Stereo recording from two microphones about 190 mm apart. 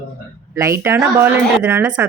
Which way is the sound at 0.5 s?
15° right (ahead or behind).